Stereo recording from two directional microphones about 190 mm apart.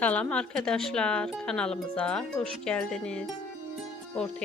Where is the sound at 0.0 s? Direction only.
5° left (ahead or behind).